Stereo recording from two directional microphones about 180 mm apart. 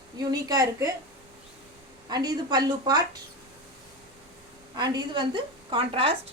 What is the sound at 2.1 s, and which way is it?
Speech, 25° right (ahead or behind).